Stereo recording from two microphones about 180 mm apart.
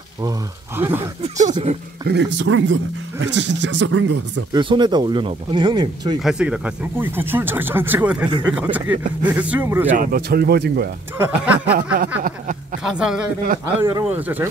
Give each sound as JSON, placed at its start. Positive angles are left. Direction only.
{"t": 0.2, "sound": "speech", "side_deg": -15}
{"t": 1.5, "sound": "speech", "side_deg": -35}
{"t": 2.0, "sound": "speech", "side_deg": -80}
{"t": 4.5, "sound": "speech", "side_deg": -25}
{"t": 6.2, "sound": "speech", "side_deg": -5}
{"t": 9.9, "sound": "speech", "side_deg": -60}
{"t": 11.1, "sound": "speech", "side_deg": -10}
{"t": 11.7, "sound": "speech", "side_deg": -60}
{"t": 12.2, "sound": "a sound", "side_deg": -50}
{"t": 12.8, "sound": "a man's voice", "side_deg": -5}